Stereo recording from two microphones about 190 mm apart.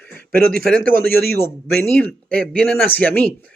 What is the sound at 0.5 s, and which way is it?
Speech, 50° right (ahead or behind).